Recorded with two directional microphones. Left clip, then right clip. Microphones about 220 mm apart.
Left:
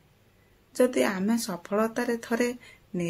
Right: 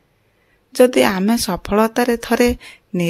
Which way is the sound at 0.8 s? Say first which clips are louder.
Right 11 dB; 40° right (ahead or behind).